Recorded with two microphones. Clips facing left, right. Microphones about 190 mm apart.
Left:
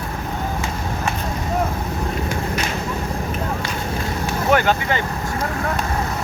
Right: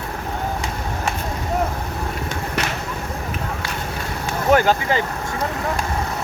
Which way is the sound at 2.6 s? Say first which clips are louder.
Right 1 dB; 70° right (ahead or behind).